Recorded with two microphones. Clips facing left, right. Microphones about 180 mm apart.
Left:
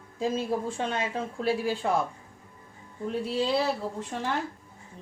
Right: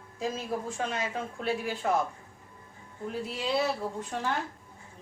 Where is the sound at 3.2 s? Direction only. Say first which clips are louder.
Left 11 dB; 30° left (ahead or behind).